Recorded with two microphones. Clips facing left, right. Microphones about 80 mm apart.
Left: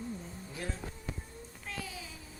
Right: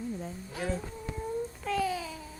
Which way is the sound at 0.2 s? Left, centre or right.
Right.